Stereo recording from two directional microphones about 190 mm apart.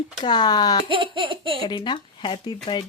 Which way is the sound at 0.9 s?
25° right (ahead or behind).